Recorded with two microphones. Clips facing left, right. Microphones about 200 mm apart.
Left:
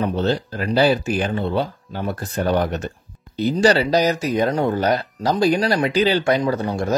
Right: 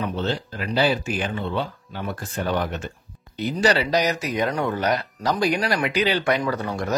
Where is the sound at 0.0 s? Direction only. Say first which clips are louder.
Left 5 dB; 40° left (ahead or behind).